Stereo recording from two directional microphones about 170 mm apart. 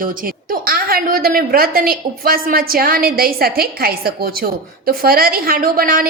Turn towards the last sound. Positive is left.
turn(degrees=-55)  # may be behind; listen again after turning